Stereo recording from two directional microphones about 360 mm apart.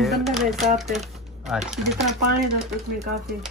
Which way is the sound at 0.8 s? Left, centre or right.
Centre.